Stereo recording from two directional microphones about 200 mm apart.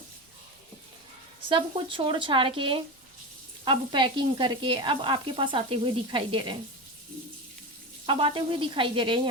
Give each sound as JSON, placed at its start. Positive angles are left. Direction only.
{"t": 1.5, "sound": "sizzle", "side_deg": -25}
{"t": 8.0, "sound": "sizzle", "side_deg": -25}